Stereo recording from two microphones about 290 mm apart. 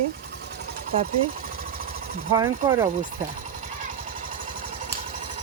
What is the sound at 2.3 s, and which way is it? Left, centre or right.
Speech, centre.